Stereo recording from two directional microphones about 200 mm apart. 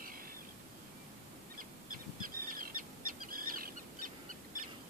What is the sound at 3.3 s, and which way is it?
Fowl, 45° right (ahead or behind).